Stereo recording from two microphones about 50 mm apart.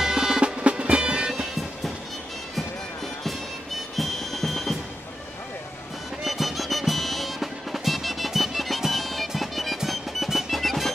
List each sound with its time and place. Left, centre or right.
0.0 s music: centre
3.9 s music: centre
6.2 s music: centre